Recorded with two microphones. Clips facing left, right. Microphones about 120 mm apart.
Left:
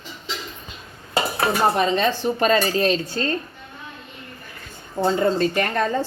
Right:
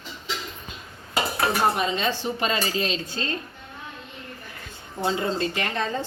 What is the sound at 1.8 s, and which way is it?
Speech, 55° left (ahead or behind).